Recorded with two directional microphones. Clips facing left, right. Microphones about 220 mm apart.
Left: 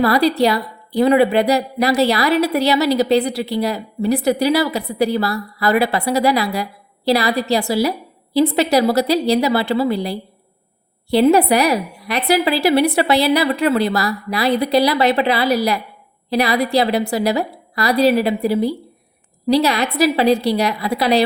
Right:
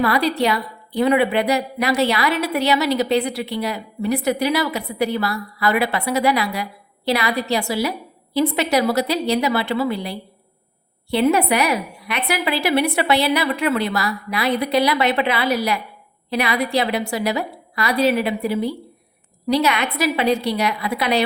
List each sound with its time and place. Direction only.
0.0 s a woman's voice: 35° left (ahead or behind)